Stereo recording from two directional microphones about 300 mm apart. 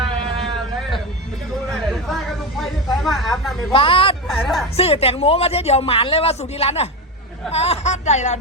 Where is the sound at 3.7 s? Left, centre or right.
Centre.